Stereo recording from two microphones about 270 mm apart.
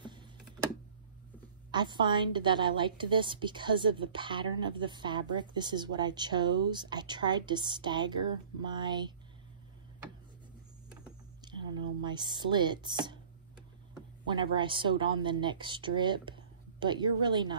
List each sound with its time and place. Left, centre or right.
1.7 s a woman's voice: centre
11.4 s a sound: centre
14.2 s a woman's voice: centre